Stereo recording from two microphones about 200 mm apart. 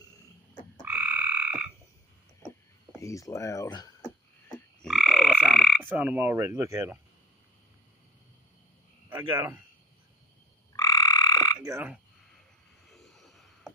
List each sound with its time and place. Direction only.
0.8 s croak: 10° right (ahead or behind)
2.9 s speech: 15° left (ahead or behind)
4.8 s croak: centre (ahead or behind)
5.9 s speech: 10° right (ahead or behind)
10.8 s frog: 20° left (ahead or behind)
11.5 s croak: 10° right (ahead or behind)
12.9 s vehicle: centre (ahead or behind)